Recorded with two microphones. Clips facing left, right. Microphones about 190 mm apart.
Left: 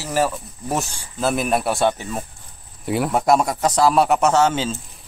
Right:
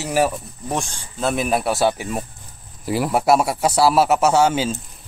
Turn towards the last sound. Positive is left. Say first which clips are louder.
# right 1 dB
turn(degrees=-10)  # may be behind; listen again after turning